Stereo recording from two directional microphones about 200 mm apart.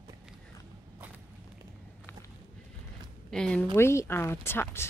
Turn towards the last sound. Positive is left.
turn(degrees=10)  # may be behind; listen again after turning